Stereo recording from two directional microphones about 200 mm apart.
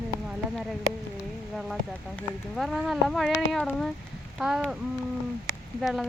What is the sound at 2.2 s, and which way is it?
Speech, centre (ahead or behind).